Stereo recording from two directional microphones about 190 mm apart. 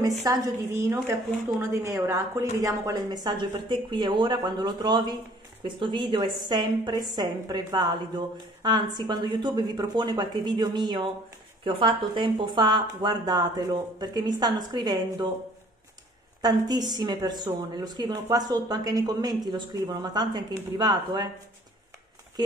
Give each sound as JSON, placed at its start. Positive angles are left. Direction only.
{"t": 0.2, "sound": "a woman's voice", "side_deg": -15}
{"t": 16.3, "sound": "a woman's voice", "side_deg": -20}